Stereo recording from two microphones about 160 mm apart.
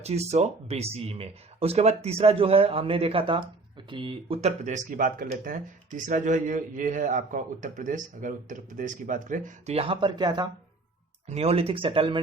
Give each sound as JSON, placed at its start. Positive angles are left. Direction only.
{"t": 0.0, "sound": "a man's voice", "side_deg": -40}
{"t": 9.7, "sound": "speech", "side_deg": -35}
{"t": 11.3, "sound": "speech", "side_deg": -40}